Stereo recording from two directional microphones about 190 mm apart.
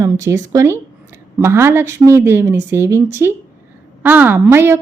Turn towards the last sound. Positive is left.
turn(degrees=-10)  # may be behind; listen again after turning